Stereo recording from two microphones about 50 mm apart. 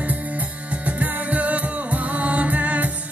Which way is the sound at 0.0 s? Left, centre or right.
Right.